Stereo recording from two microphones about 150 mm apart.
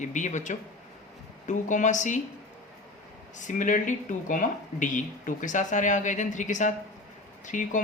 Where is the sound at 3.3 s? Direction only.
55° left (ahead or behind).